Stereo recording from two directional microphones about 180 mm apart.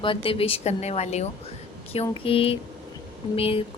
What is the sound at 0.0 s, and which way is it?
A woman's voice, 30° left (ahead or behind).